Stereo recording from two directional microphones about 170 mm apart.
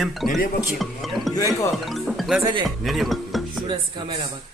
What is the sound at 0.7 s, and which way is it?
Speech, centre (ahead or behind).